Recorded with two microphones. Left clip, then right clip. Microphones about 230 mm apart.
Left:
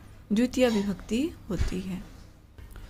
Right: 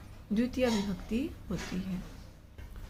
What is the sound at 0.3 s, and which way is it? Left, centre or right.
A woman's voice, left.